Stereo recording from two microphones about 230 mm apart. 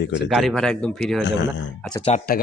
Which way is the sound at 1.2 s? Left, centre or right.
Left.